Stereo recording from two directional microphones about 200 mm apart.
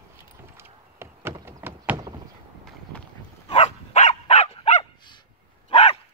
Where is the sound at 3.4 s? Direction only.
35° left (ahead or behind).